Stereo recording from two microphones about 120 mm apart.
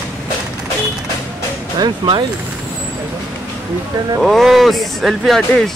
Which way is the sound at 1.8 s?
40° right (ahead or behind).